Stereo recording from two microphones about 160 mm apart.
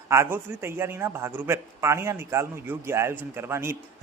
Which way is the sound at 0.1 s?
15° right (ahead or behind).